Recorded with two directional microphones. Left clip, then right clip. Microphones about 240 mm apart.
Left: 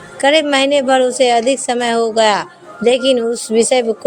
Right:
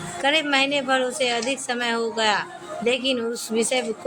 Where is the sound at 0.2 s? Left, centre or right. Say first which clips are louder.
Left 8 dB; left.